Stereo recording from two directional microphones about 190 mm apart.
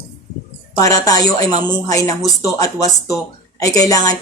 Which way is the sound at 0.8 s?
20° left (ahead or behind).